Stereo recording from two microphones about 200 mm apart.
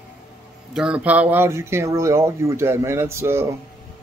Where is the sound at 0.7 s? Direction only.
5° right (ahead or behind).